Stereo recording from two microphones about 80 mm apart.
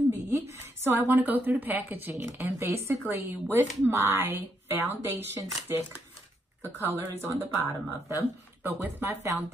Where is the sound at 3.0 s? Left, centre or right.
Right.